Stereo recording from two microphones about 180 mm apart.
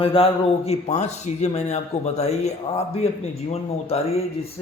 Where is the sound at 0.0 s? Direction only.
30° left (ahead or behind).